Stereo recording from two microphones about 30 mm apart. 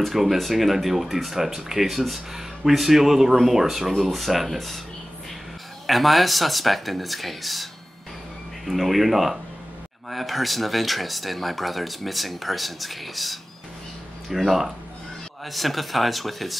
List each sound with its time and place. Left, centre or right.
0.1 s speech: centre
5.9 s speech: centre
8.6 s speech: centre